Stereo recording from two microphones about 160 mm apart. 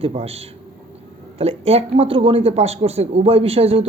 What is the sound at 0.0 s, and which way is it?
Speech, 40° right (ahead or behind).